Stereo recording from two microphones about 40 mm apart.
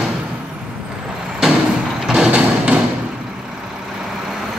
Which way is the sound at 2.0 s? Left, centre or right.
Centre.